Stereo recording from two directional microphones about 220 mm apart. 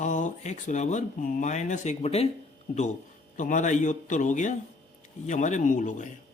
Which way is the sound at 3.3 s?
35° left (ahead or behind).